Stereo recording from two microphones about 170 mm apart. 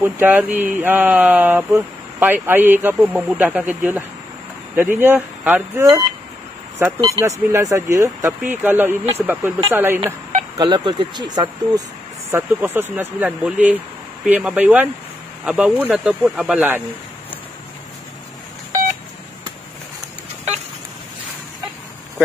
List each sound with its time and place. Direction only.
0.0 s speech: 10° right (ahead or behind)
10.6 s speech: 25° right (ahead or behind)
12.3 s speech: 10° right (ahead or behind)